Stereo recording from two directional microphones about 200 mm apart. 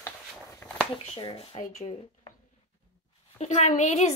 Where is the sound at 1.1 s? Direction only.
25° left (ahead or behind).